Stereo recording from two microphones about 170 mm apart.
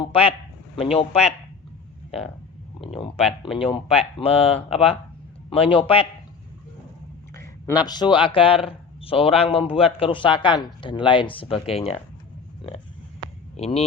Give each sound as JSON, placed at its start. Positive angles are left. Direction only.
{"t": 0.0, "sound": "speech", "side_deg": 35}
{"t": 7.3, "sound": "speech", "side_deg": 25}
{"t": 13.6, "sound": "speech", "side_deg": 35}